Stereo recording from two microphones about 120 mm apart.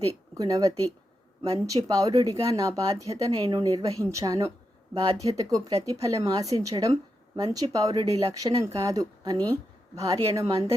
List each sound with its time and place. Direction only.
0.3 s speech: 30° right (ahead or behind)
3.3 s speech: 40° right (ahead or behind)
3.7 s speech: 30° right (ahead or behind)